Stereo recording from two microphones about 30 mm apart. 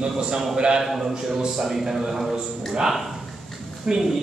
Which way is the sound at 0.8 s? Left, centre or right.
Centre.